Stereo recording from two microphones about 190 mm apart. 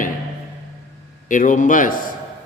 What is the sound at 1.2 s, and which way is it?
Speech, 40° left (ahead or behind).